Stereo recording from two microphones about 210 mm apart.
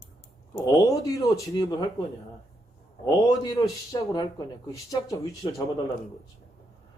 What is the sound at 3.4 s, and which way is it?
Speech, 20° left (ahead or behind).